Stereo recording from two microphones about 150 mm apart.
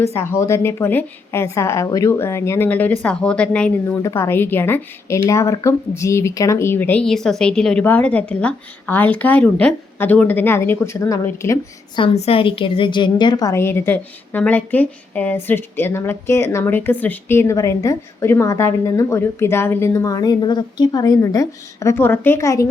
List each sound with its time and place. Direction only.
0.0 s a woman's voice: 15° left (ahead or behind)
12.1 s a woman's voice: 40° left (ahead or behind); by 22.7 s 20° left (ahead or behind)